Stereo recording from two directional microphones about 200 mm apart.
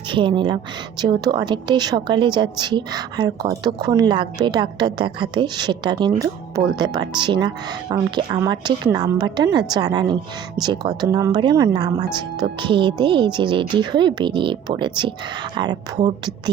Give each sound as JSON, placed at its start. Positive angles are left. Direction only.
{"t": 0.1, "sound": "a woman's voice", "side_deg": -25}